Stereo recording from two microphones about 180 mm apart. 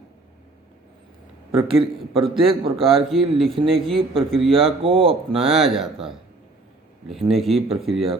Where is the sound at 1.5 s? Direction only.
30° right (ahead or behind).